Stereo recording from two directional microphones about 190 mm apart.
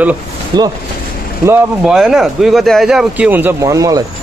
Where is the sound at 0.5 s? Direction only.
20° right (ahead or behind).